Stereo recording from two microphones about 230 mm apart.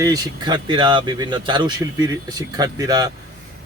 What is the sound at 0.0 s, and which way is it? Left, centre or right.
A man's voice, centre.